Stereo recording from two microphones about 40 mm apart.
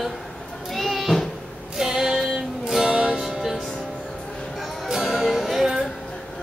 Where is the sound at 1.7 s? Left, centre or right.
Centre.